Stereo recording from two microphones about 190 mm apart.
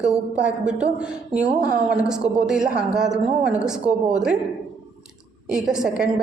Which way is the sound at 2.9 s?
5° right (ahead or behind).